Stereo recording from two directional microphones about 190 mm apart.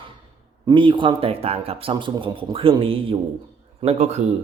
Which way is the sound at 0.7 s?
25° right (ahead or behind).